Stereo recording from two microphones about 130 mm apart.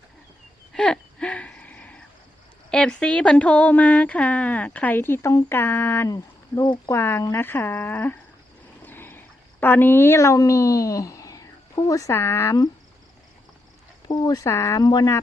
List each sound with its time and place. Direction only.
0.7 s a sound: 5° left (ahead or behind)
2.6 s speech: 5° left (ahead or behind)
6.6 s speech: 35° left (ahead or behind)
6.9 s speech: 20° left (ahead or behind)
14.1 s speech: 30° left (ahead or behind)